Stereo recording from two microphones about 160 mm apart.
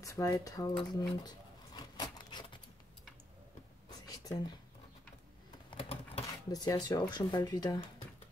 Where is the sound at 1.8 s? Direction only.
25° left (ahead or behind).